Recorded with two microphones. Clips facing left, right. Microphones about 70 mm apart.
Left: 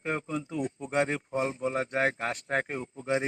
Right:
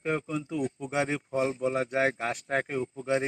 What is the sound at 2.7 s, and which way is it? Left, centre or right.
Speech, left.